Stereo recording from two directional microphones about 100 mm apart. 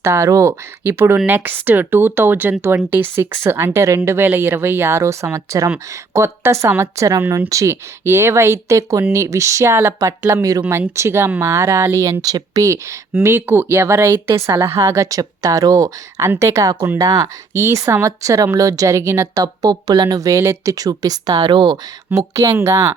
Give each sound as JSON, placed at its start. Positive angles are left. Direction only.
{"t": 0.0, "sound": "a woman's voice", "side_deg": -30}
{"t": 22.1, "sound": "speech", "side_deg": -35}